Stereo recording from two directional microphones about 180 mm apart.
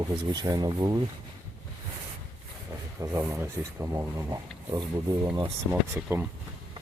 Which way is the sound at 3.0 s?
15° right (ahead or behind).